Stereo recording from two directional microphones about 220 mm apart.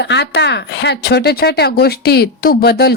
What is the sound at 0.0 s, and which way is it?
A woman's voice, 50° left (ahead or behind).